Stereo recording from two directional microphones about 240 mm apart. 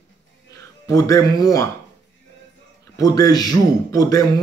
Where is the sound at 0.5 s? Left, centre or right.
Centre.